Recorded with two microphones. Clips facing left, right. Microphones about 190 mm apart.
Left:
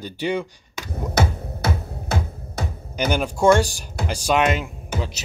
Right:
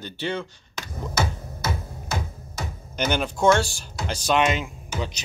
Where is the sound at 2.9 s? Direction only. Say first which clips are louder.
Left 2 dB; 10° left (ahead or behind).